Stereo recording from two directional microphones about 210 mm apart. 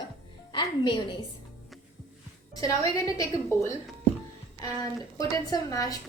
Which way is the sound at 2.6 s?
15° left (ahead or behind).